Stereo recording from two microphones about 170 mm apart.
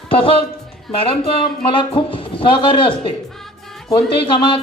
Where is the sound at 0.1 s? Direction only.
30° left (ahead or behind).